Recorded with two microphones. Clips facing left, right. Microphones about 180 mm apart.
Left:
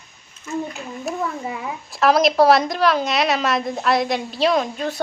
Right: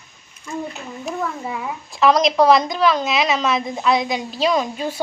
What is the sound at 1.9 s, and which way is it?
A woman's voice, centre (ahead or behind).